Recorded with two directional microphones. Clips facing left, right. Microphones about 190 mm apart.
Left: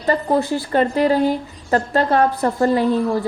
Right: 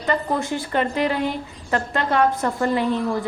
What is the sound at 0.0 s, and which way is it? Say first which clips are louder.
A woman's voice: left 5 dB; 35° left (ahead or behind).